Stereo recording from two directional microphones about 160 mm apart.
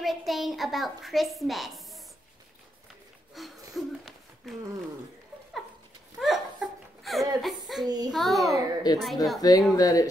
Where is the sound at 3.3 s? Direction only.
Centre (ahead or behind).